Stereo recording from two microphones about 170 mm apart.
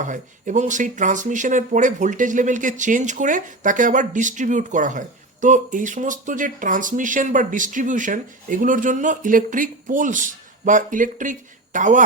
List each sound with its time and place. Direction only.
0.0 s speech: 50° right (ahead or behind)